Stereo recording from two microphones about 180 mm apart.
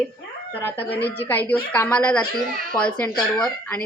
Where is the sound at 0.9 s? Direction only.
65° left (ahead or behind).